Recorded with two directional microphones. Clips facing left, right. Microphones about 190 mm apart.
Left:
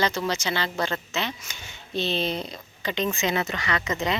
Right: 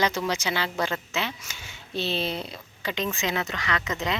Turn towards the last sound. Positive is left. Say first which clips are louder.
# left 2 dB
turn(degrees=0)  # may be behind; listen again after turning